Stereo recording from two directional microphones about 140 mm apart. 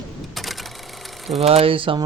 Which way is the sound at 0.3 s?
Centre (ahead or behind).